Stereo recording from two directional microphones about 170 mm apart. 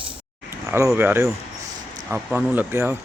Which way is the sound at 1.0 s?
15° right (ahead or behind).